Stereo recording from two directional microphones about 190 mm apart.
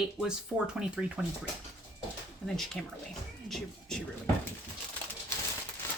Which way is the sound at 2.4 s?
Centre (ahead or behind).